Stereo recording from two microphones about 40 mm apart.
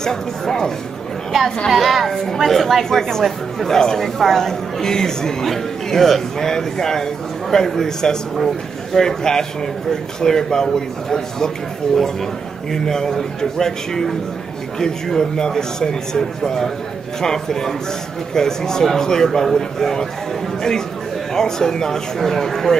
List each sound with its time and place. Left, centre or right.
0.0 s speech: centre
1.7 s a woman's voice: centre
3.3 s a woman's voice: centre
3.7 s speech: centre
21.3 s speech: centre